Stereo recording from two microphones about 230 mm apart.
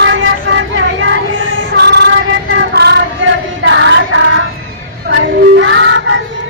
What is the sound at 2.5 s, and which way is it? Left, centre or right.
Child singing, right.